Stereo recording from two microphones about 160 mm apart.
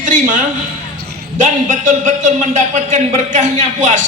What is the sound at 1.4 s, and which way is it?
A man's voice, 50° right (ahead or behind).